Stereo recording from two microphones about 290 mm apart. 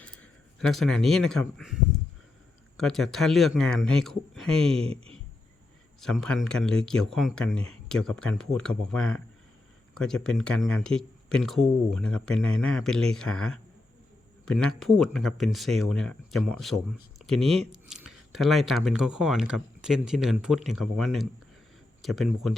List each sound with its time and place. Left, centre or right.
0.0 s speech: centre
4.9 s speech: centre
6.0 s speech: centre